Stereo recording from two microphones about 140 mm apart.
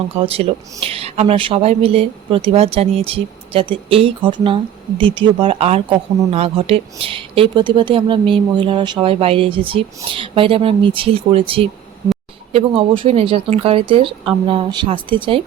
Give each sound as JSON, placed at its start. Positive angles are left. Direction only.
{"t": 0.2, "sound": "speech", "side_deg": -45}